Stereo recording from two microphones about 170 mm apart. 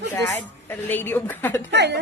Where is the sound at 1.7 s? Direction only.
90° right.